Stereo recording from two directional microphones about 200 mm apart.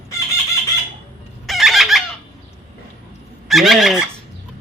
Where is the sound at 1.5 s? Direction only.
Centre (ahead or behind).